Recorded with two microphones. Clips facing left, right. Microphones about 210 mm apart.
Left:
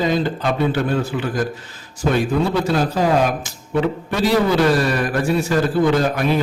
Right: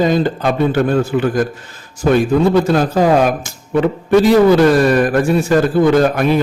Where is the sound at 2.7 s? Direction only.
50° right (ahead or behind).